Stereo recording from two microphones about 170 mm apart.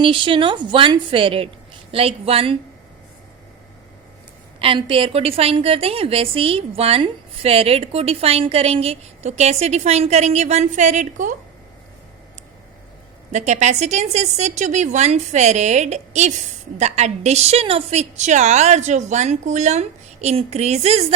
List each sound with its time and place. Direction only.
0.0 s a woman's voice: 30° right (ahead or behind)
4.6 s a woman's voice: 30° right (ahead or behind); by 11.3 s 50° right (ahead or behind)
13.3 s a woman's voice: 45° right (ahead or behind)